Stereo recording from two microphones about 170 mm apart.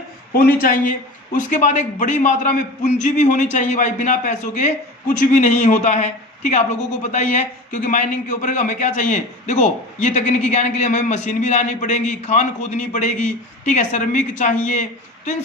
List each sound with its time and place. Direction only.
0.3 s a man's voice: 60° left (ahead or behind)